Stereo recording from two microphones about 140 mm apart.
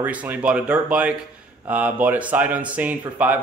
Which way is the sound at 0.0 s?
10° right (ahead or behind).